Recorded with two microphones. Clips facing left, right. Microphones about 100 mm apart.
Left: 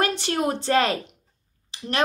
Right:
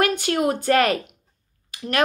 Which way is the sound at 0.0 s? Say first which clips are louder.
Right 3 dB; 30° left (ahead or behind).